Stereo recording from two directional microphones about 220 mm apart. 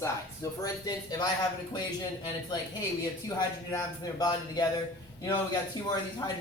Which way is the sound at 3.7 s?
15° left (ahead or behind).